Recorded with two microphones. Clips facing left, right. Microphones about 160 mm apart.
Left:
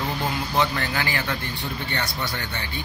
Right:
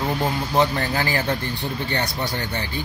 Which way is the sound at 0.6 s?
35° right (ahead or behind).